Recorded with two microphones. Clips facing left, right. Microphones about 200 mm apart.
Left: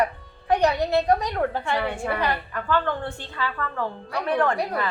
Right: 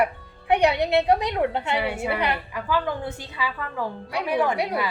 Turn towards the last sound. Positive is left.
turn(degrees=-10)  # may be behind; listen again after turning